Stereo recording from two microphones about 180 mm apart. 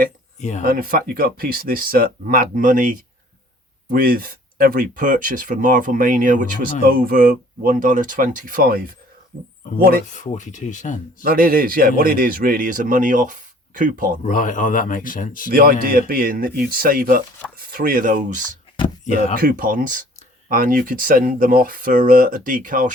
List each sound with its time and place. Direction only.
0.3 s speech: 40° left (ahead or behind)
0.6 s a man's voice: 55° right (ahead or behind)
10.1 s speech: 40° left (ahead or behind)
11.2 s a man's voice: 55° right (ahead or behind)
14.3 s speech: 45° left (ahead or behind)
15.4 s a man's voice: 55° right (ahead or behind)